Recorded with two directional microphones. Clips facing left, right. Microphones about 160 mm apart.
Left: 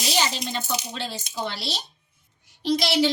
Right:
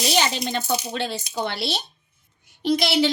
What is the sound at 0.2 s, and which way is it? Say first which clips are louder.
A woman's voice: right 3 dB; 60° right (ahead or behind).